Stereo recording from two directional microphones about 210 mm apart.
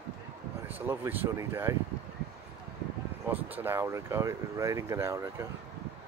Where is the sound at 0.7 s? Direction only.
10° right (ahead or behind).